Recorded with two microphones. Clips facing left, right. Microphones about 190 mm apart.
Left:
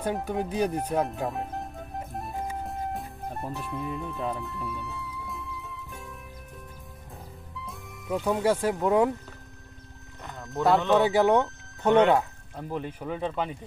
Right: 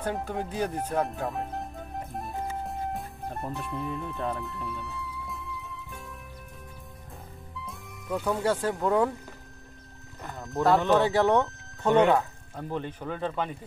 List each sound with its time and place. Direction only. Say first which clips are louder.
0.0 s speech: left 2 dB; 15° left (ahead or behind)
1.0 s speech: left 1 dB; centre (ahead or behind)
2.6 s music: even; centre (ahead or behind)
7.5 s music: even; centre (ahead or behind)
8.2 s speech: left 2 dB; 15° left (ahead or behind)
10.2 s speech: even; centre (ahead or behind)
11.0 s speech: left 1 dB; 15° left (ahead or behind)
12.5 s speech: even; 5° left (ahead or behind)